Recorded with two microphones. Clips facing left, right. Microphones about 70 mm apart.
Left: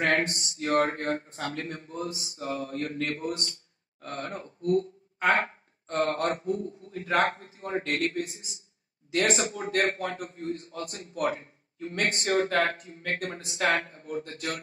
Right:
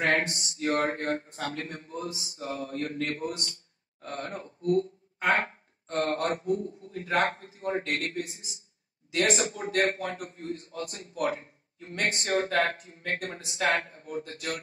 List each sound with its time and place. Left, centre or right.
0.1 s a man's voice: left
4.3 s speech: left
5.2 s a sound: left
6.1 s a man's voice: left